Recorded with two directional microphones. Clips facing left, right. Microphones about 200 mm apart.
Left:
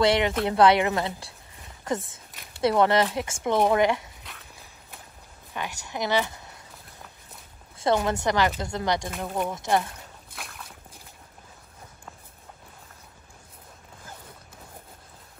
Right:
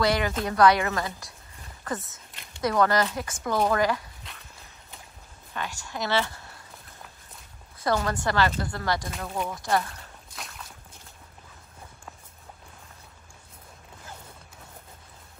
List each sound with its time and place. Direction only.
0.0 s speech: 25° left (ahead or behind)
2.6 s speech: 25° left (ahead or behind)
5.5 s a woman's voice: 15° left (ahead or behind)
7.8 s speech: 20° left (ahead or behind)
9.1 s speech: 5° left (ahead or behind)
9.5 s speech: 20° left (ahead or behind)
10.3 s a sound: centre (ahead or behind)